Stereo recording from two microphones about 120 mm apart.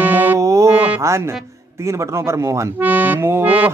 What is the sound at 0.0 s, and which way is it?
Mantra, 15° right (ahead or behind).